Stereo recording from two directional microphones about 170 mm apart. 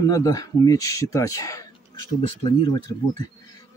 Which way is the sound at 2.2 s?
30° left (ahead or behind).